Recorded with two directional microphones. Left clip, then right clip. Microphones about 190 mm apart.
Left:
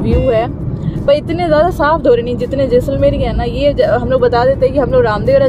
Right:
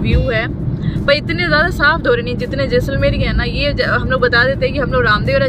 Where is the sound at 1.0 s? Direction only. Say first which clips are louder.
Left 3 dB; 15° left (ahead or behind).